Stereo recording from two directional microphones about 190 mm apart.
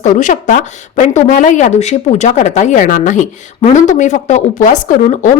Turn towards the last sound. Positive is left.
turn(degrees=40)  # may be behind; listen again after turning